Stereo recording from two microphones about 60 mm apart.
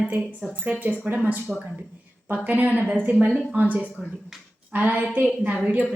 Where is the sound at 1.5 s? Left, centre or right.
Centre.